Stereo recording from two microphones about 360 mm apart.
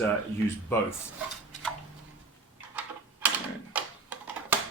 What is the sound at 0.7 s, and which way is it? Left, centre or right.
Speech, centre.